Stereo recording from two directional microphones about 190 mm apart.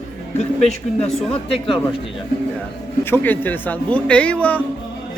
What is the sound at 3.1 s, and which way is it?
A man's voice, 10° left (ahead or behind).